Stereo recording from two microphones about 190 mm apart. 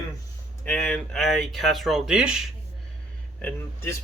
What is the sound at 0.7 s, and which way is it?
Speech, 5° left (ahead or behind).